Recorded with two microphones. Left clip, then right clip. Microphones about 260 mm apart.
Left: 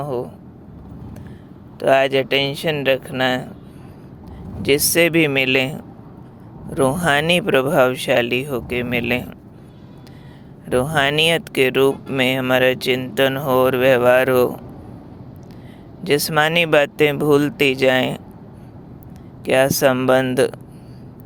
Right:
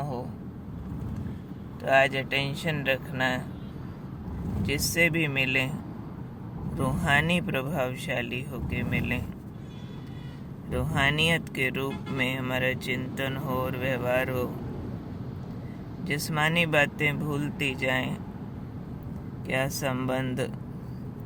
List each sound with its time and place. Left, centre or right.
0.0 s vehicle: left
1.8 s speech: left
4.6 s speech: left
6.7 s speech: left
10.7 s speech: left
16.0 s speech: left
19.5 s speech: left